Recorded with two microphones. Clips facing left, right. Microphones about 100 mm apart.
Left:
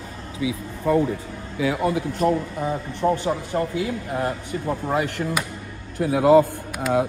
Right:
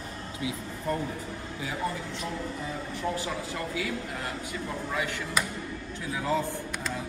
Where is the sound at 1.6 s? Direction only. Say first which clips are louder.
Left 11 dB; 90° left.